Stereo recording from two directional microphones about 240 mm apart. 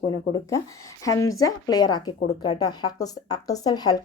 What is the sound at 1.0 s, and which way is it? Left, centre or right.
Speech, centre.